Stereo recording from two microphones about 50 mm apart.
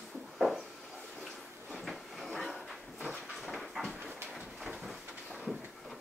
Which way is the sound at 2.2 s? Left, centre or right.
Centre.